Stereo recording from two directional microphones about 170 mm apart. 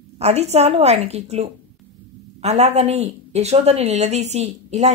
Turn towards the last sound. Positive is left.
turn(degrees=-40)  # may be behind; listen again after turning